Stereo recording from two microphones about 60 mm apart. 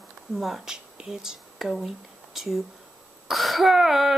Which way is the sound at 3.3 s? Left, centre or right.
Centre.